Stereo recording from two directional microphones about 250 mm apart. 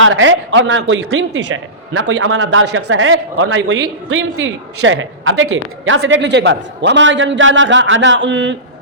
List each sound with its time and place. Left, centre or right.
0.0 s a man's voice: right